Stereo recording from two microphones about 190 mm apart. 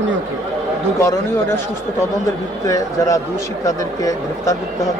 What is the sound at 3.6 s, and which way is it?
Speech, 15° left (ahead or behind).